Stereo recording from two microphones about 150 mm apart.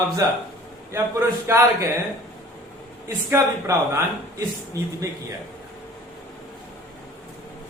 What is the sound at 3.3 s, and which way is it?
Speech, 20° right (ahead or behind).